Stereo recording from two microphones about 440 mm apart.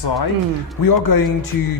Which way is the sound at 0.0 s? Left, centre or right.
Left.